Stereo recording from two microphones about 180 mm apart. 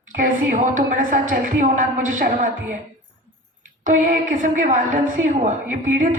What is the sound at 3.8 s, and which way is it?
A woman's voice, 45° right (ahead or behind).